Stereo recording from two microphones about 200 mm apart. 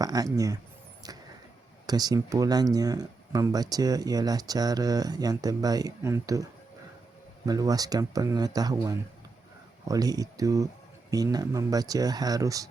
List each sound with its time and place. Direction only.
0.0 s speech: 20° right (ahead or behind)
1.0 s a sound: 20° right (ahead or behind)
1.9 s speech: 20° right (ahead or behind)